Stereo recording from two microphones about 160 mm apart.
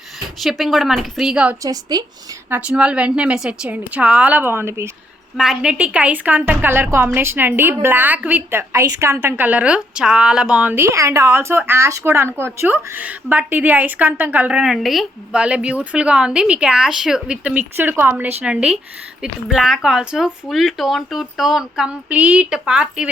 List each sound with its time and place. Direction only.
0.4 s speech: centre (ahead or behind)
1.6 s a woman's voice: 25° right (ahead or behind)
2.5 s a woman's voice: 5° right (ahead or behind)
5.4 s a woman's voice: 5° right (ahead or behind)